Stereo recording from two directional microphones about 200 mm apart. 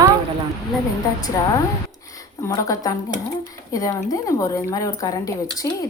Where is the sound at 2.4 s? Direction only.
15° left (ahead or behind).